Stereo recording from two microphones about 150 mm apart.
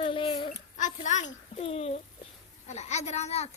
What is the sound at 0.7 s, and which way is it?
Speech, 55° left (ahead or behind).